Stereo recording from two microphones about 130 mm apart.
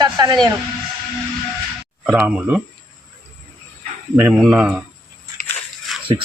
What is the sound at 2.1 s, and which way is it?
Speech, 10° right (ahead or behind).